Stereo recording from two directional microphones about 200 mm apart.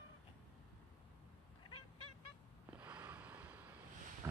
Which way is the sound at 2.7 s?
10° right (ahead or behind).